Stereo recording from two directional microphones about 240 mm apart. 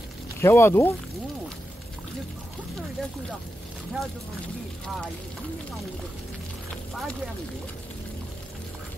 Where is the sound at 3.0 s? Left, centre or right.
Centre.